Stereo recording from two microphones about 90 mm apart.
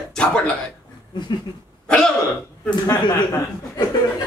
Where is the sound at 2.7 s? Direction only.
50° left (ahead or behind).